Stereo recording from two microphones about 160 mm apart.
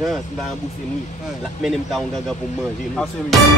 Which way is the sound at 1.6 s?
Centre (ahead or behind).